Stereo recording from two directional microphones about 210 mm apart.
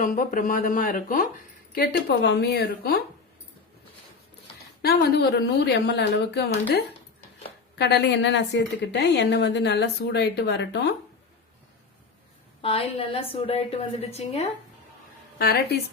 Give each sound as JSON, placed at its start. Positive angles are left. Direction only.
{"t": 0.0, "sound": "speech", "side_deg": 40}
{"t": 4.8, "sound": "speech", "side_deg": 45}
{"t": 7.8, "sound": "speech", "side_deg": 50}
{"t": 12.6, "sound": "a woman's voice", "side_deg": 25}
{"t": 15.4, "sound": "speech", "side_deg": 50}